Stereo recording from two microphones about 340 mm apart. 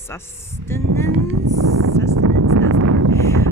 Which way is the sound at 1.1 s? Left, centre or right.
Right.